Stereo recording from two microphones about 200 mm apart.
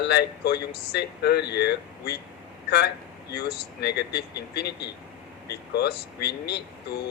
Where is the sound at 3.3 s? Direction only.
55° left (ahead or behind).